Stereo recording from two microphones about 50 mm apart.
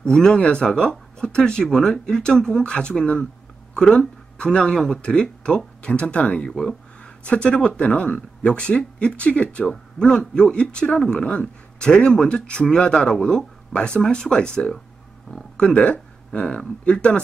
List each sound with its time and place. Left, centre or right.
0.0 s speech: centre
7.2 s speech: left
13.7 s speech: left